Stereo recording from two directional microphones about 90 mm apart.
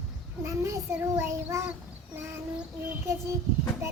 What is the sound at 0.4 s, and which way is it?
Child singing, 35° right (ahead or behind).